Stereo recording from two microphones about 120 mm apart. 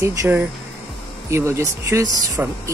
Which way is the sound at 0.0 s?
20° right (ahead or behind).